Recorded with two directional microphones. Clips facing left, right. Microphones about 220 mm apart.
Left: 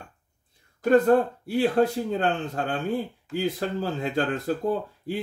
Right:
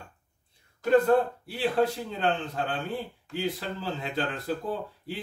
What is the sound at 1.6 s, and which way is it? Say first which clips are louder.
Speech: left 4 dB; 45° left (ahead or behind).